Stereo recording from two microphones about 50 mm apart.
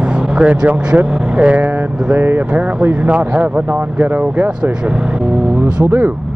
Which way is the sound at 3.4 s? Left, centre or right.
Right.